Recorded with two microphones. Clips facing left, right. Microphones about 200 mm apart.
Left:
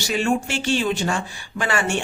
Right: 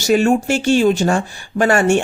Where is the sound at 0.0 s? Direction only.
45° right (ahead or behind).